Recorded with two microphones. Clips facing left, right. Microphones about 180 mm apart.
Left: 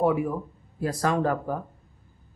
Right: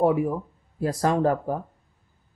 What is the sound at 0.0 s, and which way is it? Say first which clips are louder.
Speech: right 2 dB; 35° right (ahead or behind).